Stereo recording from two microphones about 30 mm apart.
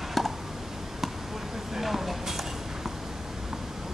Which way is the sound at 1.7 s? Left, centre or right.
Centre.